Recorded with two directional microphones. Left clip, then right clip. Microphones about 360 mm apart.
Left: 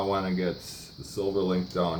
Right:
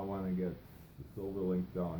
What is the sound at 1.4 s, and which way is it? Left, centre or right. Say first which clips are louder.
Speech: left 10 dB; centre.